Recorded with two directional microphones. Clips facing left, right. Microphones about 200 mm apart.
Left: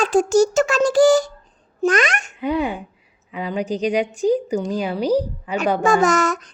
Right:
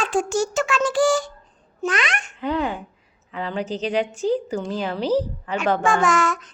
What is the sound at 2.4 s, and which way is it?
A woman's voice, 10° left (ahead or behind).